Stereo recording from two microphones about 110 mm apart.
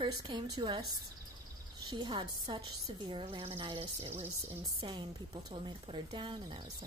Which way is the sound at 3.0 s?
60° right (ahead or behind).